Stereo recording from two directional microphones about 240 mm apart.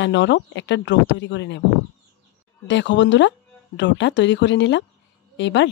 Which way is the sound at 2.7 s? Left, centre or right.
Left.